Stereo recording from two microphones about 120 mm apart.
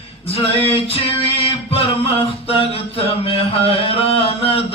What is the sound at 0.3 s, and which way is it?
Male singing, 55° left (ahead or behind).